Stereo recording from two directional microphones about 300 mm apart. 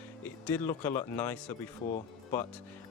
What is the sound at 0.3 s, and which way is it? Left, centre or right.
Speech, centre.